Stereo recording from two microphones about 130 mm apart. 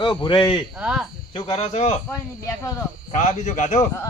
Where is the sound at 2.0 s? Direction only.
20° left (ahead or behind).